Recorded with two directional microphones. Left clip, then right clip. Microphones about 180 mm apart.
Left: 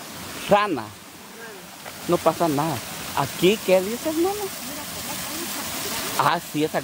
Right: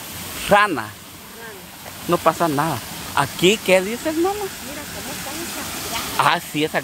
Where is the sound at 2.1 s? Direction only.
Centre (ahead or behind).